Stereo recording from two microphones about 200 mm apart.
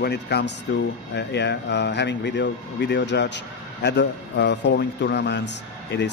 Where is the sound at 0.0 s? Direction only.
55° left (ahead or behind).